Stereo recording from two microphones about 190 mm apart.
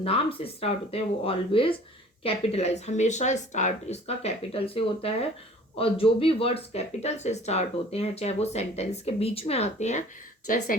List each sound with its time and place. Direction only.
0.0 s speech: 30° left (ahead or behind)